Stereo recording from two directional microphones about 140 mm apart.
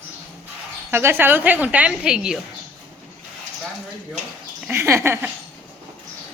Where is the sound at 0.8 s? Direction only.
15° right (ahead or behind).